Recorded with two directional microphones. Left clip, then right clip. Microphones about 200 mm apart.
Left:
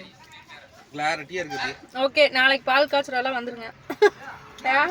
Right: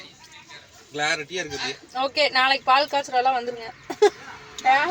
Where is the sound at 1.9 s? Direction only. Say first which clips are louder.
Left 2 dB; 5° left (ahead or behind).